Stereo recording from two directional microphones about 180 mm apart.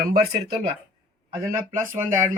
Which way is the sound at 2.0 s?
10° right (ahead or behind).